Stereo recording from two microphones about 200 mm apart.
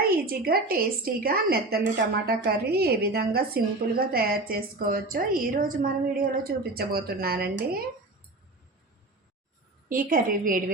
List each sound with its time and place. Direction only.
0.3 s a woman's voice: 45° right (ahead or behind)
9.9 s a woman's voice: 45° right (ahead or behind)